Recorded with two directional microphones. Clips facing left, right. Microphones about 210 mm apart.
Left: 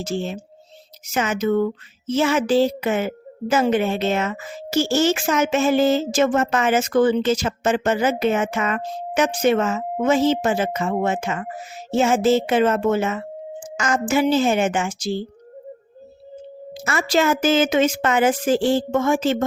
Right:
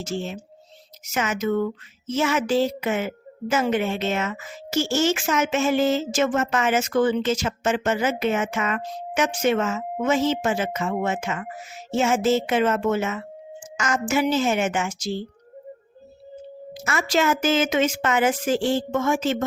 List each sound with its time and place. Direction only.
0.0 s speech: 35° left (ahead or behind)
16.8 s speech: 35° left (ahead or behind)